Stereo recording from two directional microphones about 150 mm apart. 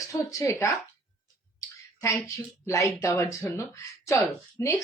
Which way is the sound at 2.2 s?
20° left (ahead or behind).